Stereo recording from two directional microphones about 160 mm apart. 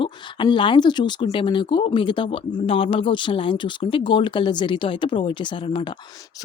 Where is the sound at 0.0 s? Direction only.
30° left (ahead or behind).